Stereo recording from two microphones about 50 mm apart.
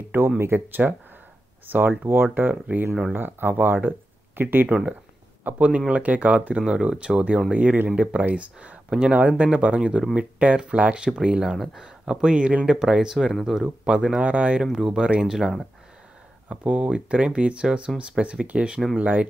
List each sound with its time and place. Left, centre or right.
0.4 s speech: right
4.6 s speech: right
6.6 s speech: centre
7.5 s speech: right
11.4 s speech: centre
11.8 s speech: centre
14.1 s speech: right
14.6 s speech: centre
16.4 s speech: right
18.9 s speech: right